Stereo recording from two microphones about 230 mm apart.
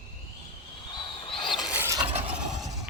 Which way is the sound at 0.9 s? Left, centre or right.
Left.